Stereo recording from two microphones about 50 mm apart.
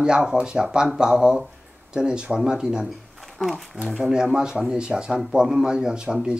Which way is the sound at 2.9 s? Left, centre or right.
Centre.